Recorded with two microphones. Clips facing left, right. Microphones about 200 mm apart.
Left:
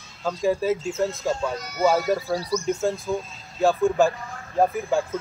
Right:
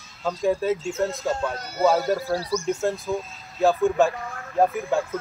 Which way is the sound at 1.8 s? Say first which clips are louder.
Even; centre (ahead or behind).